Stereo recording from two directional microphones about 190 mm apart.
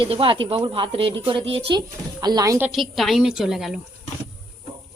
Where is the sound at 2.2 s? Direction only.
20° right (ahead or behind); by 3.8 s centre (ahead or behind).